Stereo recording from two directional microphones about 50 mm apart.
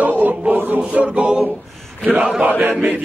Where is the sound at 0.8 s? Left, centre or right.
Right.